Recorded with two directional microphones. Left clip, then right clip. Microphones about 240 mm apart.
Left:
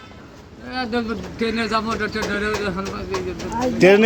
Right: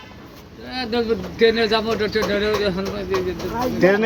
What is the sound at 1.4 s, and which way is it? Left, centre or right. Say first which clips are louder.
Speech: right 5 dB; centre.